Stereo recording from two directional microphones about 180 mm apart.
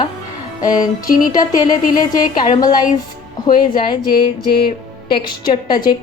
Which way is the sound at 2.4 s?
25° left (ahead or behind).